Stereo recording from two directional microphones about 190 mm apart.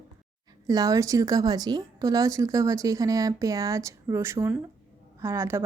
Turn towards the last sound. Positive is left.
turn(degrees=-15)  # may be behind; listen again after turning